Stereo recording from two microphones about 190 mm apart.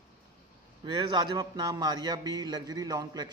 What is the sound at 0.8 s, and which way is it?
A man's voice, 25° right (ahead or behind).